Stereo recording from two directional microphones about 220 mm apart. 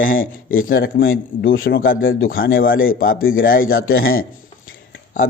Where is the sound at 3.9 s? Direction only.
65° left (ahead or behind).